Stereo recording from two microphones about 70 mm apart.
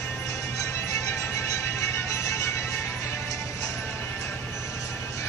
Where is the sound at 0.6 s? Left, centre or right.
Left.